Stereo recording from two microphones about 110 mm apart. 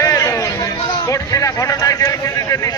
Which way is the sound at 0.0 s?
30° left (ahead or behind).